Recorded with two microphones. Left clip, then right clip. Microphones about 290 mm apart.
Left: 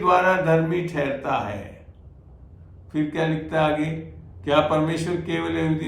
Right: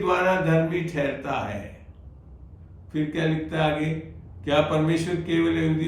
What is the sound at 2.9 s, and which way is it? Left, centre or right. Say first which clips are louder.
Speech: left 2 dB; centre.